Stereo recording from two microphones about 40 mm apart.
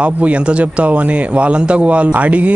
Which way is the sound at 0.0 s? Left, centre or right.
Right.